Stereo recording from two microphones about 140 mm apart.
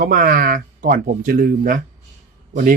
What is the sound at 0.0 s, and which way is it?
Speech, 75° right (ahead or behind).